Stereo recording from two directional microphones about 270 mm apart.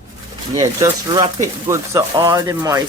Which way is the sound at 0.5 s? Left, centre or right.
Centre.